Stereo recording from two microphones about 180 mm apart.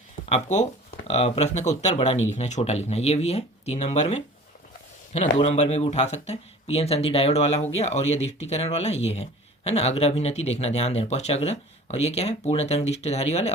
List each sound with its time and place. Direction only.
0.3 s speech: 40° left (ahead or behind)